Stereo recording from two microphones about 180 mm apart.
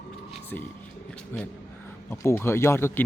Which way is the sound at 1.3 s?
10° left (ahead or behind).